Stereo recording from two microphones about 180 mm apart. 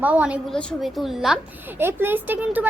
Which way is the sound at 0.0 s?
10° right (ahead or behind).